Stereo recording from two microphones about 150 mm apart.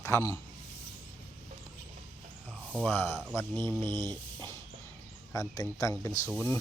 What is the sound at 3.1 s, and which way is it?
Speech, 5° right (ahead or behind).